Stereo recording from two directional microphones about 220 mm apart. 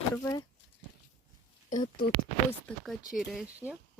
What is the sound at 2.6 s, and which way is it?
Speech, centre (ahead or behind).